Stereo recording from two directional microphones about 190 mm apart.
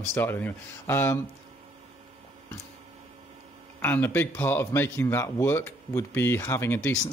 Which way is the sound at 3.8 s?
10° left (ahead or behind).